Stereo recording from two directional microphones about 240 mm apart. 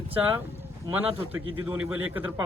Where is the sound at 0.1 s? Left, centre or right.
Centre.